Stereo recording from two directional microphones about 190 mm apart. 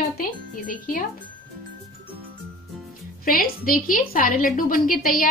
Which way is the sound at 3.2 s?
50° left (ahead or behind).